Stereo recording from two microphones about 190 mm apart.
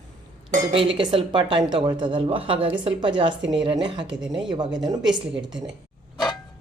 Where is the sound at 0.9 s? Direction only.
25° right (ahead or behind).